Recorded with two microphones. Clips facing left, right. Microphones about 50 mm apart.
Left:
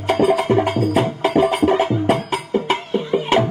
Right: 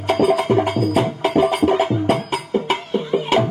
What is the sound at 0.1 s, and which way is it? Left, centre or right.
Music, centre.